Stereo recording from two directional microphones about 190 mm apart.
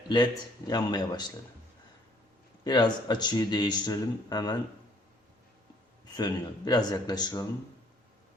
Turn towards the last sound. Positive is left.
turn(degrees=20)  # may be behind; listen again after turning